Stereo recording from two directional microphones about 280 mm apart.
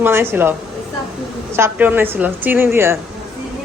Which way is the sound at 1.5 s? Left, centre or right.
Centre.